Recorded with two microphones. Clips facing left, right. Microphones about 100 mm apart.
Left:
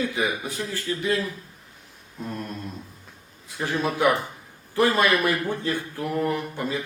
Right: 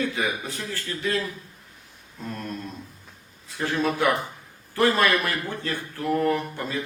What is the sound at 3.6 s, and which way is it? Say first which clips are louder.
Speech: left 1 dB; 15° left (ahead or behind).